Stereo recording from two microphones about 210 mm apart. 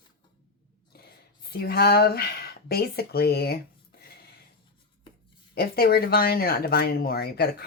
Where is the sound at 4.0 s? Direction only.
45° left (ahead or behind).